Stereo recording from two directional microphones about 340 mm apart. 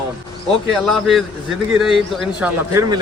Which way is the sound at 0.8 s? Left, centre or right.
Centre.